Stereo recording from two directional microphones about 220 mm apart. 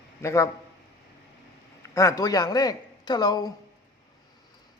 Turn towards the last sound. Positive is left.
turn(degrees=20)  # may be behind; listen again after turning